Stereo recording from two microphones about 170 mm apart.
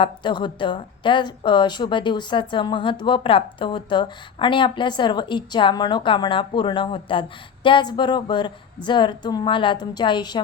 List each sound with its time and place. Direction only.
0.0 s a woman's voice: 30° left (ahead or behind)